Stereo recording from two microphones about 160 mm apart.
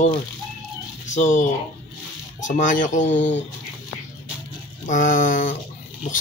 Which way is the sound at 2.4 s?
50° left (ahead or behind).